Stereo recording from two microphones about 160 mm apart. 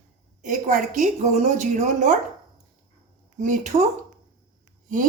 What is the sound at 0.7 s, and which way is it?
A woman's voice, 55° right (ahead or behind).